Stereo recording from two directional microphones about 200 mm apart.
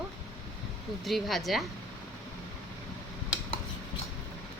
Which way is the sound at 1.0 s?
Centre (ahead or behind).